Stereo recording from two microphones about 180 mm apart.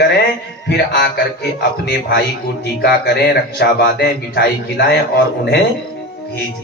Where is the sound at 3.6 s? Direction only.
65° left (ahead or behind).